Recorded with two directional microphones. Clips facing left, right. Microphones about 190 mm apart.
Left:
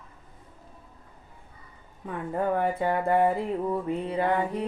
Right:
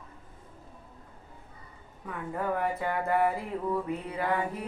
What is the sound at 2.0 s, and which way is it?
Speech, 30° left (ahead or behind).